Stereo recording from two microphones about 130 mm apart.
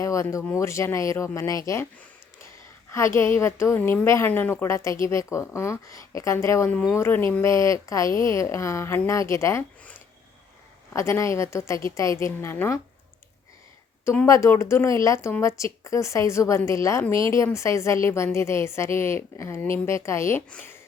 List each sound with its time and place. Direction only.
0.0 s a woman's voice: 25° left (ahead or behind)
3.2 s a woman's voice: 20° left (ahead or behind)
6.7 s a woman's voice: 10° left (ahead or behind)
10.9 s a woman's voice: 25° left (ahead or behind)
14.3 s a woman's voice: 25° left (ahead or behind)